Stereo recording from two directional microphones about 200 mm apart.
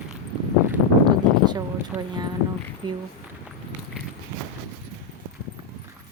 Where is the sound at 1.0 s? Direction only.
20° right (ahead or behind).